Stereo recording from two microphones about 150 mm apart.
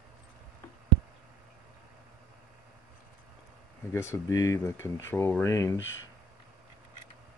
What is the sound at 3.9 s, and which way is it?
Speech, 20° left (ahead or behind).